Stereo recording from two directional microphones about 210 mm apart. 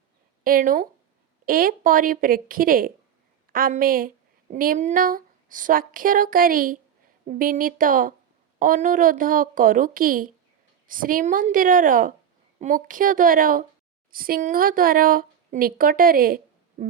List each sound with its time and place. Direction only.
0.4 s a woman's voice: 40° right (ahead or behind)